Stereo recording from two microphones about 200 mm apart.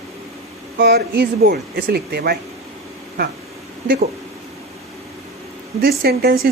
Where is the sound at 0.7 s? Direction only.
50° right (ahead or behind).